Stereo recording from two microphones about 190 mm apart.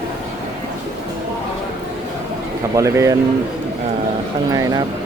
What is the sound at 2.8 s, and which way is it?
Speech, 15° right (ahead or behind).